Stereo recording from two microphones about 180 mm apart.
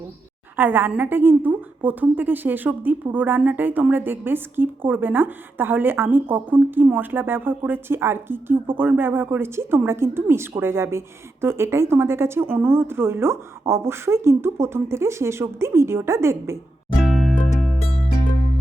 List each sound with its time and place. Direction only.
0.5 s a woman's voice: 10° right (ahead or behind)
17.0 s music: centre (ahead or behind)